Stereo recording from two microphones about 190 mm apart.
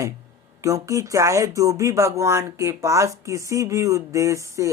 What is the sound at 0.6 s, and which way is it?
Speech, 15° right (ahead or behind).